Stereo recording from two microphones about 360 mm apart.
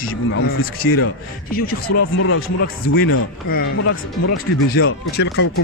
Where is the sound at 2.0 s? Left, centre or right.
Left.